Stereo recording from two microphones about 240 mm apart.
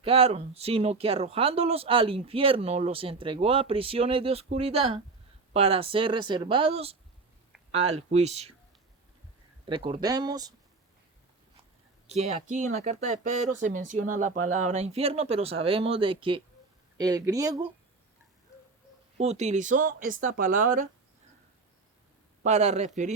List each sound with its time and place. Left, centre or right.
0.0 s speech: right
9.6 s speech: right
12.0 s speech: right
14.3 s speech: right
14.6 s speech: right
19.2 s speech: right
22.4 s speech: right